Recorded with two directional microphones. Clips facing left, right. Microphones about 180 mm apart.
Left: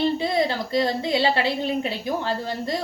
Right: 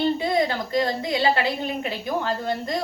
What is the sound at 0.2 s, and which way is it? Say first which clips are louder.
A woman's voice: even; 30° left (ahead or behind).